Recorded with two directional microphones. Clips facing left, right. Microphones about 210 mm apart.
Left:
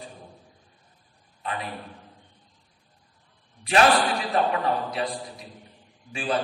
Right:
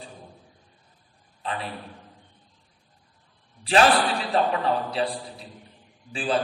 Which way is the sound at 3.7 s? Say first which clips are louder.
Even; 30° right (ahead or behind).